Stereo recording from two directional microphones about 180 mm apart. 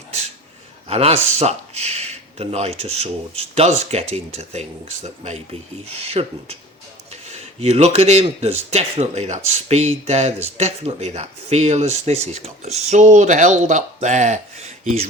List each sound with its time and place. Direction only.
0.9 s speech: 35° right (ahead or behind)